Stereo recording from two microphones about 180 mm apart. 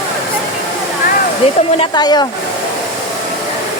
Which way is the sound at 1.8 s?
25° left (ahead or behind).